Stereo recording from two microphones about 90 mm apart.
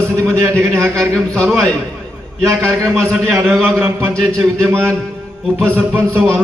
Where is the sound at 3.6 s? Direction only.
25° right (ahead or behind).